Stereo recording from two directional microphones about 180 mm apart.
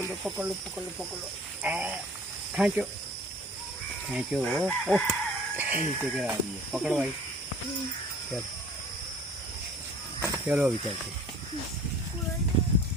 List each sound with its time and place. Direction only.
0.3 s speech: 5° right (ahead or behind)
1.6 s speech: 5° right (ahead or behind)
4.1 s speech: 5° right (ahead or behind)
10.2 s cricket: 15° right (ahead or behind)